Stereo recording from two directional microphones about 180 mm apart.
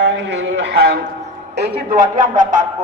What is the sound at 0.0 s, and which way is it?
A man's voice, 80° right.